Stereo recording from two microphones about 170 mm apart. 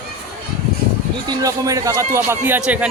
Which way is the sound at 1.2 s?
20° right (ahead or behind).